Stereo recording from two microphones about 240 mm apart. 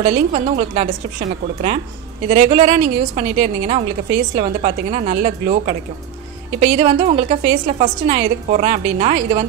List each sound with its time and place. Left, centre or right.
0.0 s a woman's voice: right
2.2 s a woman's voice: right